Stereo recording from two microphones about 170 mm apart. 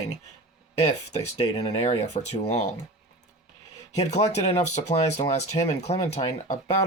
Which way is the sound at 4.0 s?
40° left (ahead or behind).